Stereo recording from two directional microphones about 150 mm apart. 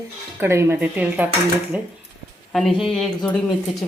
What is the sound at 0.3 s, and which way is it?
Speech, 15° right (ahead or behind).